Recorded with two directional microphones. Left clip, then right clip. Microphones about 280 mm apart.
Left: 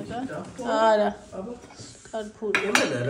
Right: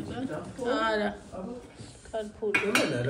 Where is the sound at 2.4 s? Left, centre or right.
Left.